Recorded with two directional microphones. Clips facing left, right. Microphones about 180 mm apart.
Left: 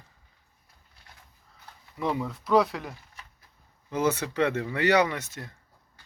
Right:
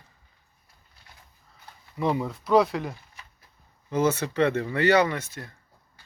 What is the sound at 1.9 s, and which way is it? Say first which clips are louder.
Speech: right 3 dB; 5° right (ahead or behind).